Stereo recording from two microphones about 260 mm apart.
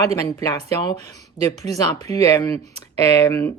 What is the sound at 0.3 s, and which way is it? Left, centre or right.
Speech, centre.